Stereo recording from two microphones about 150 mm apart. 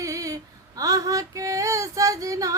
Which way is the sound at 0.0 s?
20° right (ahead or behind).